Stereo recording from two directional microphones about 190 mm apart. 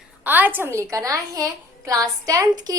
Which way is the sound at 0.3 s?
10° right (ahead or behind).